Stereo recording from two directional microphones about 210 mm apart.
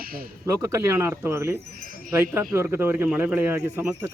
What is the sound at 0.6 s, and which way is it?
Speech, 10° right (ahead or behind).